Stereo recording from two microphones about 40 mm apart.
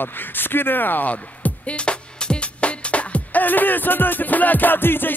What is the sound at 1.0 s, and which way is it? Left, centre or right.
Music, left.